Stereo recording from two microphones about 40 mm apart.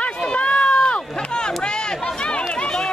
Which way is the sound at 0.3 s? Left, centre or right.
Left.